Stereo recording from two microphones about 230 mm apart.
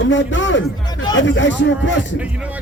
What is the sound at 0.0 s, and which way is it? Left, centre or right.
Speech, left.